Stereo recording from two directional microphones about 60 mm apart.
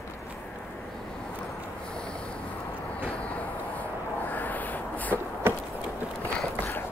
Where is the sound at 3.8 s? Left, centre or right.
Left.